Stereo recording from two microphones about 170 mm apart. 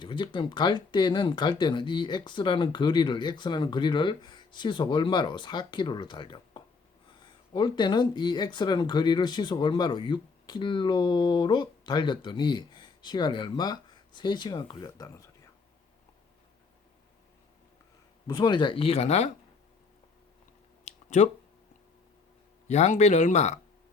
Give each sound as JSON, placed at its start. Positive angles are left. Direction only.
{"t": 0.0, "sound": "speech", "side_deg": 30}
{"t": 18.3, "sound": "speech", "side_deg": 25}
{"t": 20.8, "sound": "a sound", "side_deg": 45}
{"t": 22.6, "sound": "speech", "side_deg": 40}